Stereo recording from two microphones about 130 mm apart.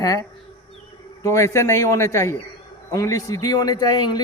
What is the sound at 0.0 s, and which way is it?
A man's voice, 30° left (ahead or behind).